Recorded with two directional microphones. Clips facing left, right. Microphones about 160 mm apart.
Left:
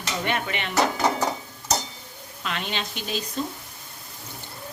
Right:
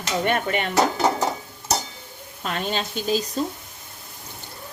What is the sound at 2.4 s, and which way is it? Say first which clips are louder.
Speech: right 4 dB; 40° right (ahead or behind).